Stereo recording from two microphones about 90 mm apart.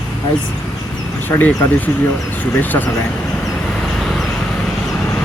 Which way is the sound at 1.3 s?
20° left (ahead or behind).